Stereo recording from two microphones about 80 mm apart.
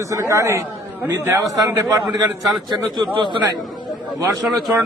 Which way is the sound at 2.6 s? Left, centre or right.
Right.